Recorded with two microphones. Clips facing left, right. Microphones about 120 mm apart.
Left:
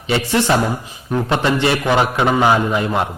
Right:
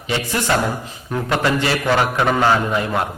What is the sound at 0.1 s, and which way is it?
A man's voice, 25° left (ahead or behind).